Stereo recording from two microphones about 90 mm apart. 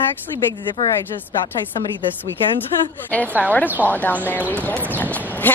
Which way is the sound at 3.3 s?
20° right (ahead or behind).